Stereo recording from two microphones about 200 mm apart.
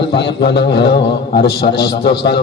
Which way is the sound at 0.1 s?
55° left (ahead or behind).